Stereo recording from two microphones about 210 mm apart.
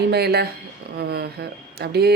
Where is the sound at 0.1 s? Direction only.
50° right (ahead or behind).